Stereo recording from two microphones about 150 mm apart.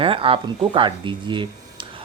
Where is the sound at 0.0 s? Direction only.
40° right (ahead or behind).